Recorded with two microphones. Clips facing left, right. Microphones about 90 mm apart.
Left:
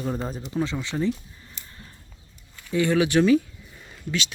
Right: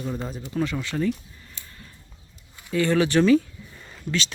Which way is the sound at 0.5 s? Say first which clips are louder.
Right 1 dB; 15° left (ahead or behind).